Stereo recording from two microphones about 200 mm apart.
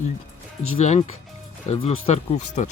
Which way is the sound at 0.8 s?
35° left (ahead or behind).